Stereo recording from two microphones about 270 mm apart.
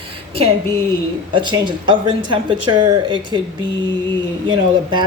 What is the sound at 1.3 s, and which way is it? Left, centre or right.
A woman's voice, centre.